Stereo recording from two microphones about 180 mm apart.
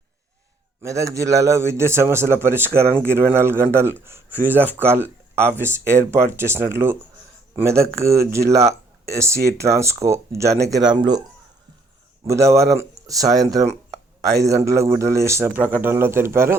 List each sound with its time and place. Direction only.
0.8 s a man's voice: 15° right (ahead or behind)
12.2 s a man's voice: 15° right (ahead or behind)